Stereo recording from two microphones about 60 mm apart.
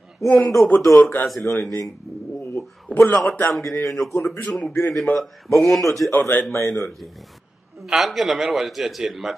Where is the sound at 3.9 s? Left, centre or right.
Centre.